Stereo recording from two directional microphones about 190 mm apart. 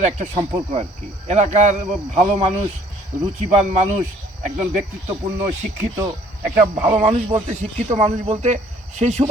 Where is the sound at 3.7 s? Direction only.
40° right (ahead or behind).